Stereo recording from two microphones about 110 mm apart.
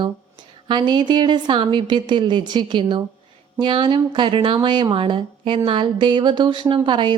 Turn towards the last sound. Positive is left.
turn(degrees=-45)  # may be behind; listen again after turning